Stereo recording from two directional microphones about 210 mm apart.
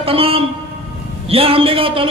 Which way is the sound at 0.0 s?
25° right (ahead or behind).